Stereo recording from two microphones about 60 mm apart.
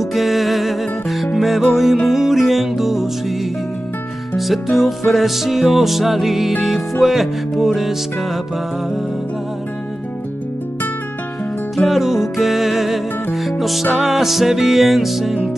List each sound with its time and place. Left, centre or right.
0.0 s music: centre
4.4 s music: centre
11.7 s music: centre